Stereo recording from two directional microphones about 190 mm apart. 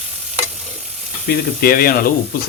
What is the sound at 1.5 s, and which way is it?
Speech, 50° left (ahead or behind).